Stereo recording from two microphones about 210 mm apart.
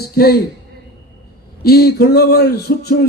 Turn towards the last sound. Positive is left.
turn(degrees=50)  # may be behind; listen again after turning